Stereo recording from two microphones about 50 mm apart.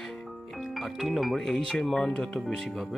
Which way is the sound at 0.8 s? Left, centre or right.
Centre.